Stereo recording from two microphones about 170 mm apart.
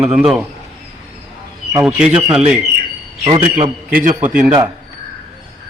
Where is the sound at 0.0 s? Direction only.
5° right (ahead or behind).